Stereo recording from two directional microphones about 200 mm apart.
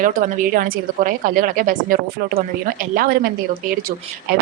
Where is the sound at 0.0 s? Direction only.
40° right (ahead or behind).